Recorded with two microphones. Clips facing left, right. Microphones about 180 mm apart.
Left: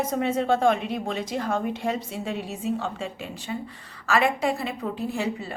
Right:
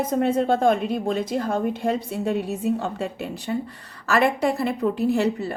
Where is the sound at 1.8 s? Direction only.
35° right (ahead or behind).